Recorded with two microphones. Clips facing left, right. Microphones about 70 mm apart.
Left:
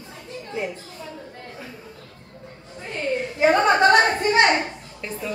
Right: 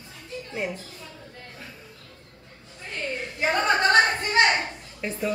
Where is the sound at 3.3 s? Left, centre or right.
Left.